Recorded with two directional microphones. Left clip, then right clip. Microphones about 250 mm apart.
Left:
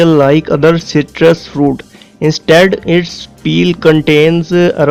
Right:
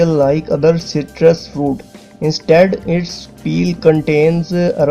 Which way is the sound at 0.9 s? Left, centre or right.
Left.